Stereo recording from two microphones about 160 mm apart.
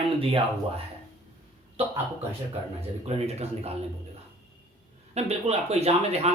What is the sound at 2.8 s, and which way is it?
Speech, 40° right (ahead or behind).